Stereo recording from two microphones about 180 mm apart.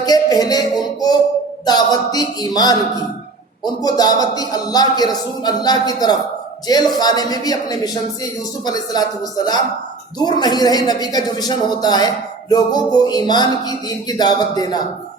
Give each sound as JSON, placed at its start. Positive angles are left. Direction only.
{"t": 0.0, "sound": "music", "side_deg": 20}
{"t": 1.6, "sound": "speech", "side_deg": 20}